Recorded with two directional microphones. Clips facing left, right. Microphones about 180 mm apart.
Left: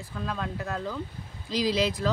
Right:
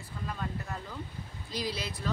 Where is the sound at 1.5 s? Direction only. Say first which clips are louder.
Left 10 dB; 90° left.